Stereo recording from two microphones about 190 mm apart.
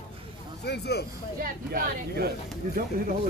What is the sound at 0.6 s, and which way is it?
Speech, 60° left (ahead or behind).